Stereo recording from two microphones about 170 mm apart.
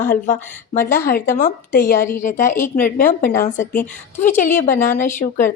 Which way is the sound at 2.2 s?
50° left (ahead or behind).